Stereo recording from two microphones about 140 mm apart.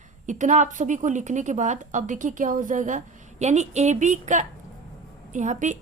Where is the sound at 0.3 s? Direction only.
65° right (ahead or behind).